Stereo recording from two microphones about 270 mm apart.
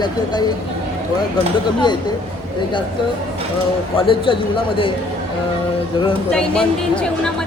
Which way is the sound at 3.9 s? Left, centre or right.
Centre.